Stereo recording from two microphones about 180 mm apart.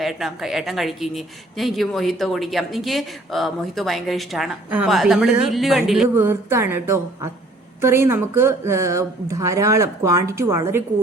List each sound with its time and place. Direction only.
0.0 s speech: centre (ahead or behind)
6.1 s speech: 15° right (ahead or behind)